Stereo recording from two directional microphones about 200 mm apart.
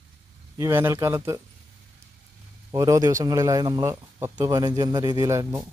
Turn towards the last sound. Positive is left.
turn(degrees=-15)  # may be behind; listen again after turning